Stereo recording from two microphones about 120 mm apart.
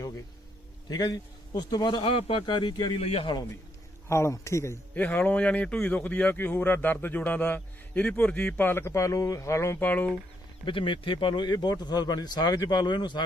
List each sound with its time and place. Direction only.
0.9 s speech: 35° left (ahead or behind)
3.0 s a man's voice: 55° left (ahead or behind)
4.1 s speech: 25° left (ahead or behind)
10.7 s speech: 45° left (ahead or behind)